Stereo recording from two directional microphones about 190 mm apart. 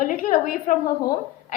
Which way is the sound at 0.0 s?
45° left (ahead or behind).